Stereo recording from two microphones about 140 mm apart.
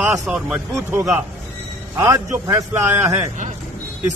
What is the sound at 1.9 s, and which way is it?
A man's voice, 20° right (ahead or behind).